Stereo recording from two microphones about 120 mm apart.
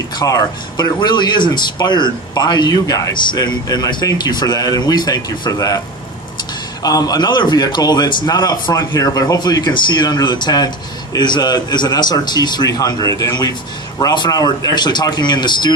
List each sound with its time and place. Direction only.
0.2 s speech: 35° left (ahead or behind)
6.8 s speech: 30° left (ahead or behind)